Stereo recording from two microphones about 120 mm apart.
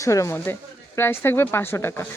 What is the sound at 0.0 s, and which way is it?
Speech, 25° left (ahead or behind).